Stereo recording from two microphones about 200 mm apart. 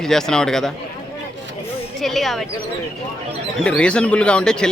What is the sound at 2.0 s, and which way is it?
Speech, centre (ahead or behind).